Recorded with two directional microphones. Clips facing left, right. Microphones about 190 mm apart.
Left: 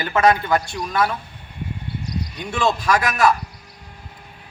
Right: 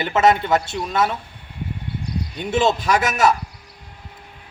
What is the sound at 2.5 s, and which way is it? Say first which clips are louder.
Speech: right 2 dB; 25° right (ahead or behind).